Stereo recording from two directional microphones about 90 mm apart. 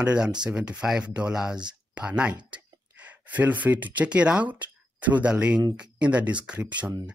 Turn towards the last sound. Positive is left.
turn(degrees=-15)  # may be behind; listen again after turning